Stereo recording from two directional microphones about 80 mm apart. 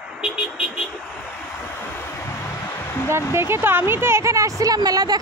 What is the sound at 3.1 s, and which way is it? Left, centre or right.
Speech, right.